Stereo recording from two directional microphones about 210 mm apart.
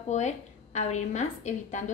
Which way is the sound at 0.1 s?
35° left (ahead or behind).